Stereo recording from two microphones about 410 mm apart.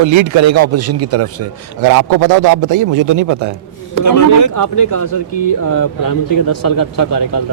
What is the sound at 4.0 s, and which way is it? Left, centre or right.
A man's voice, left.